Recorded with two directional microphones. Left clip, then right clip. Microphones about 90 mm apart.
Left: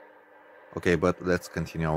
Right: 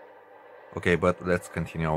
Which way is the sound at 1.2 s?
85° left.